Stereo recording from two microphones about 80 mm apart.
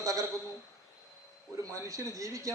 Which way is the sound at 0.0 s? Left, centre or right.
Right.